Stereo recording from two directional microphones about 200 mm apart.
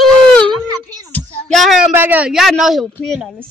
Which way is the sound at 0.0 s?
5° left (ahead or behind).